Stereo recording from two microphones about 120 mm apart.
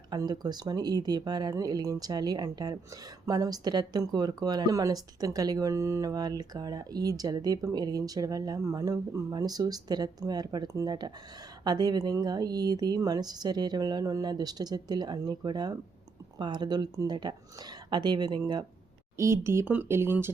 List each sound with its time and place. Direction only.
0.1 s speech: 35° right (ahead or behind)
19.1 s speech: 25° right (ahead or behind)